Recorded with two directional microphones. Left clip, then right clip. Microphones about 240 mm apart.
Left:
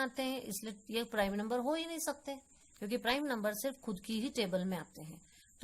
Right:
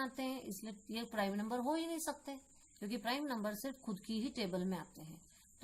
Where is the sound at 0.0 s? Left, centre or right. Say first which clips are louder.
Left 5 dB; left.